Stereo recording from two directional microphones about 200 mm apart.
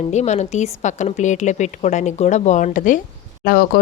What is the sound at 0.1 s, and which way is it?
A woman's voice, 35° left (ahead or behind).